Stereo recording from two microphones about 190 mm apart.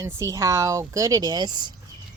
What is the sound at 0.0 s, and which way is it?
Speech, 15° right (ahead or behind).